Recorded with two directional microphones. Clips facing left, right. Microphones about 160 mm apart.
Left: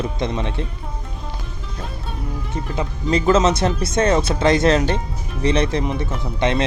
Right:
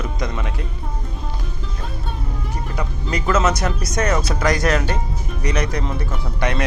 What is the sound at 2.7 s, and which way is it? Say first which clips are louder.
Speech: left 6 dB; 25° left (ahead or behind).